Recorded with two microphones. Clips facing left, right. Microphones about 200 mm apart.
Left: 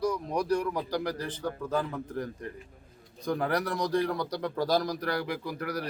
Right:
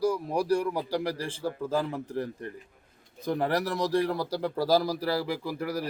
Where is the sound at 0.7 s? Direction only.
30° right (ahead or behind).